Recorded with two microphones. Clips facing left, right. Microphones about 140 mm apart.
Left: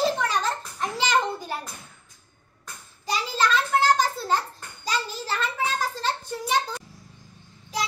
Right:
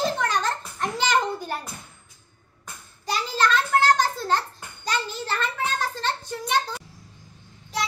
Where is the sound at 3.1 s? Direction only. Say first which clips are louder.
Right 1 dB; centre (ahead or behind).